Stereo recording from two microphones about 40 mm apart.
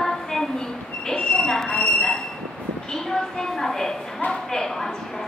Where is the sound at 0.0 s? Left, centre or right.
Centre.